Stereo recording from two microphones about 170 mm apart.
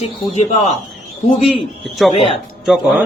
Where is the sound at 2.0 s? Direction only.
Centre (ahead or behind).